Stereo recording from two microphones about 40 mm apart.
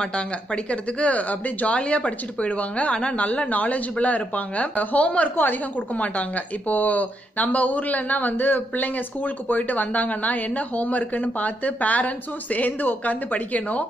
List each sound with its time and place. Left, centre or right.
0.7 s speech: left
5.3 s a woman's voice: left
5.9 s speech: left